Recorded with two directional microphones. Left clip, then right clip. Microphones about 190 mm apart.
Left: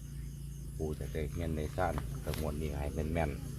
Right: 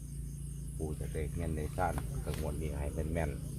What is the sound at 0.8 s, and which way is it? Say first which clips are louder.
Speech: left 2 dB; 45° left (ahead or behind).